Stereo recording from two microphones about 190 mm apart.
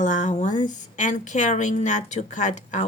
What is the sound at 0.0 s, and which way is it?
A woman's voice, 40° left (ahead or behind).